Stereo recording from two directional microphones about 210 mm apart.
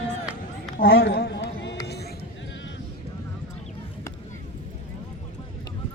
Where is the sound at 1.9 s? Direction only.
50° left (ahead or behind).